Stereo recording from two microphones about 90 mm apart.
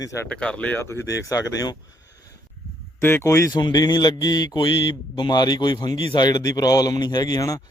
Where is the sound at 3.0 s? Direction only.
25° left (ahead or behind).